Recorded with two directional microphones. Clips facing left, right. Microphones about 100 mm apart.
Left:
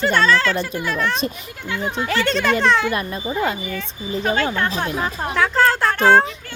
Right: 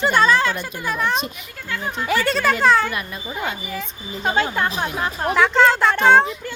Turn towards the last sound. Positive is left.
turn(degrees=5)  # may be behind; listen again after turning